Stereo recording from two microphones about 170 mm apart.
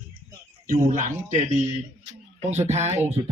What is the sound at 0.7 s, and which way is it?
Speech, 50° right (ahead or behind).